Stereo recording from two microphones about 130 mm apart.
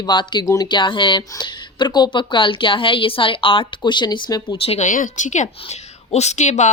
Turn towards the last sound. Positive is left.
turn(degrees=65)  # may be behind; listen again after turning